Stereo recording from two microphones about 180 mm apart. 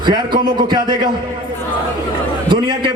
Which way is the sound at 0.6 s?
25° right (ahead or behind).